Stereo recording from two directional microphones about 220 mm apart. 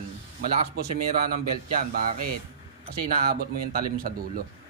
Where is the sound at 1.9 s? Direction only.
40° right (ahead or behind).